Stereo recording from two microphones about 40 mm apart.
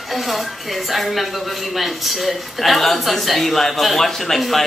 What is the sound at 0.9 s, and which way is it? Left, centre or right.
Speech, centre.